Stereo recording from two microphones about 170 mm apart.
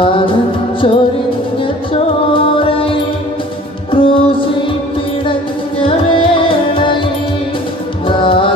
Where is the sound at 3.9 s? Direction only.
30° left (ahead or behind).